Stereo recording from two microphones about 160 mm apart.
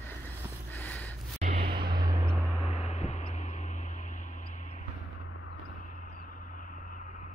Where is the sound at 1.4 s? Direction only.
50° right (ahead or behind).